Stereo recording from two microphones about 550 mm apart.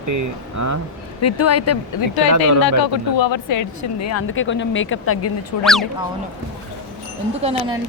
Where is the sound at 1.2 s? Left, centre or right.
Left.